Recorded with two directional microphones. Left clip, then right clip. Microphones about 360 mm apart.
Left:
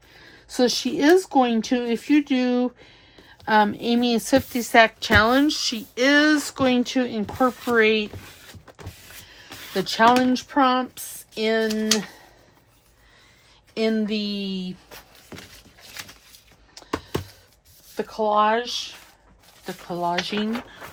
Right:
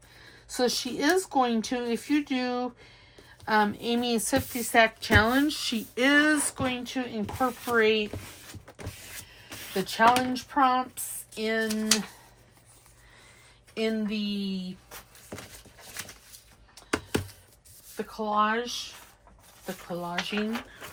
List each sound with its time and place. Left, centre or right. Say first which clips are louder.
0.4 s a woman's voice: left 6 dB; centre
7.3 s speech: left 6 dB; left
7.8 s a woman's voice: left 4 dB; centre
9.7 s a woman's voice: left 5 dB; centre
13.7 s speech: left 6 dB; centre
17.9 s a woman's voice: left 7 dB; centre